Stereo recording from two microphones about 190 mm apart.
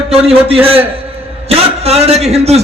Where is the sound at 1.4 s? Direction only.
35° right (ahead or behind).